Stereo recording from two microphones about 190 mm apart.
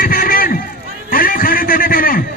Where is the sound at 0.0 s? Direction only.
50° left (ahead or behind).